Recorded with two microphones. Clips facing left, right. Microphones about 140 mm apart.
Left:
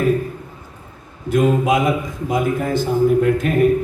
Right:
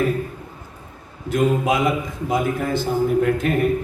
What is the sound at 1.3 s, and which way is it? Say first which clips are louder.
A man's voice: left 3 dB; 50° left (ahead or behind).